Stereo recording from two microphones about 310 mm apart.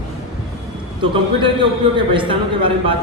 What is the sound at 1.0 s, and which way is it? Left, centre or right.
A man's voice, centre.